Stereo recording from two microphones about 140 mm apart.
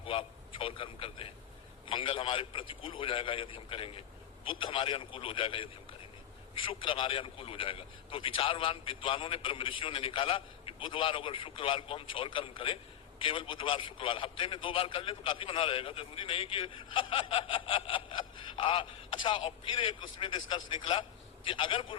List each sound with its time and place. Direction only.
0.0 s a sound: 40° left (ahead or behind)
1.9 s a man's voice: 40° left (ahead or behind)
6.7 s a man's voice: 35° left (ahead or behind)